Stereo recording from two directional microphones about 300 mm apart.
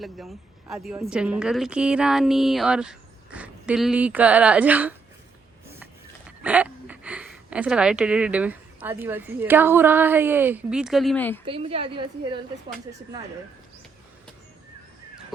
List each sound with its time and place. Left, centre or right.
0.0 s a woman's voice: centre
6.4 s speech: centre
11.4 s a woman's voice: centre